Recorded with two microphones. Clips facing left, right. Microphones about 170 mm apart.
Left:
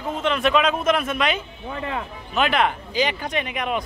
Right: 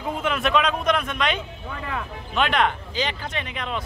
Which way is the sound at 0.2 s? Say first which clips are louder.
Left 3 dB; centre (ahead or behind).